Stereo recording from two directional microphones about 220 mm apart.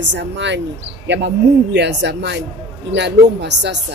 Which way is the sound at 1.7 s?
50° right (ahead or behind).